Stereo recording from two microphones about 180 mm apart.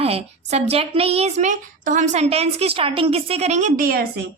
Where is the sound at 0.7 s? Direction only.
30° right (ahead or behind).